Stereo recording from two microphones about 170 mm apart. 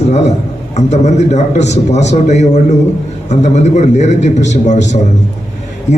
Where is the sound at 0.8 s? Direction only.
40° left (ahead or behind).